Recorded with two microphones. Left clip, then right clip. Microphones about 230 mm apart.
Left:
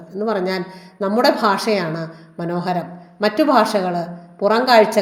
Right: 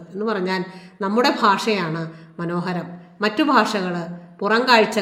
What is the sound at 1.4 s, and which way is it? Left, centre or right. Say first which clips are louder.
Speech: left 1 dB; centre.